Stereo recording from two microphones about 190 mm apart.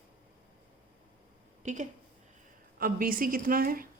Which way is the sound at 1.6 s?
40° right (ahead or behind).